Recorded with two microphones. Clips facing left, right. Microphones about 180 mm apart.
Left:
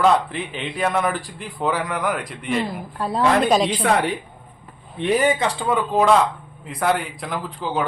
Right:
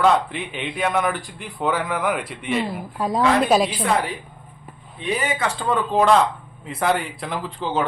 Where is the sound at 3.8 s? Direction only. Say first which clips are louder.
Left 2 dB; 75° left (ahead or behind).